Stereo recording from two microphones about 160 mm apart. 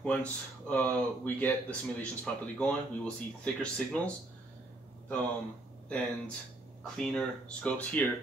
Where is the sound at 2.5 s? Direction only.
5° left (ahead or behind).